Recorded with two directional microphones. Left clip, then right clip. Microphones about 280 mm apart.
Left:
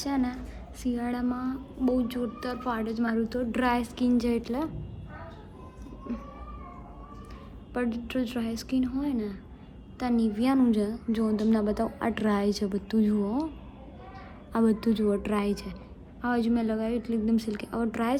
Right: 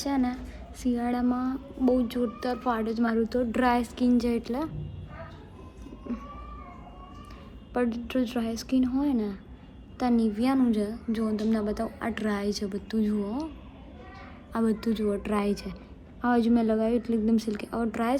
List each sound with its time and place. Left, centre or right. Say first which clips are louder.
0.0 s speech: right 1 dB; centre
7.7 s a woman's voice: right 3 dB; centre
14.5 s a woman's voice: left 2 dB; centre